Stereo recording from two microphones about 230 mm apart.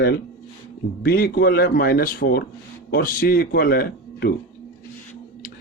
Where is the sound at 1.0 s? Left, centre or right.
Left.